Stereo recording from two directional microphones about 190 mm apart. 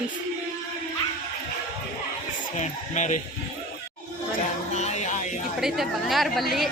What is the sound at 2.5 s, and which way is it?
Speech, 40° left (ahead or behind).